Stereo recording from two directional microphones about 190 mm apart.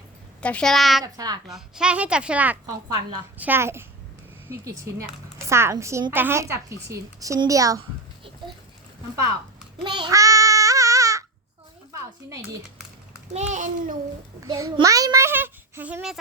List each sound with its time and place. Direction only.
0.4 s a child's voice: 5° left (ahead or behind)
1.0 s speech: 20° right (ahead or behind)
1.5 s a child's voice: centre (ahead or behind); by 7.8 s 20° right (ahead or behind)
9.8 s child singing: 25° right (ahead or behind)
13.3 s a child's voice: 40° right (ahead or behind)
14.4 s a woman's voice: 20° right (ahead or behind)